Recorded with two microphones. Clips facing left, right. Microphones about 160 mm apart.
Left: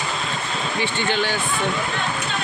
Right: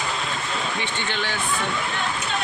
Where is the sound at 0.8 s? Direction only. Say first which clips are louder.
Left 5 dB; 30° left (ahead or behind).